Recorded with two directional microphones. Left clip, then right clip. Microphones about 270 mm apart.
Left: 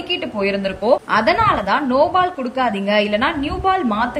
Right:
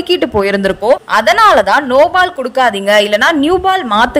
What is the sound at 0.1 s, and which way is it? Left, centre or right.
A woman's voice, centre.